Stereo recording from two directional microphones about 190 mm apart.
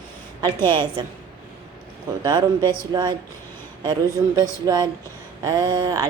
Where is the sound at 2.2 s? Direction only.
20° right (ahead or behind).